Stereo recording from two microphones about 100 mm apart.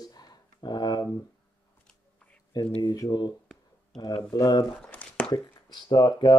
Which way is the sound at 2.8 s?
40° left (ahead or behind).